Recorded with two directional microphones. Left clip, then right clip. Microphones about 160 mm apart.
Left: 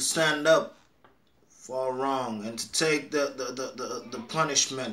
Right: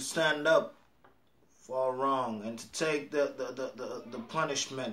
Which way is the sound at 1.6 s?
20° left (ahead or behind).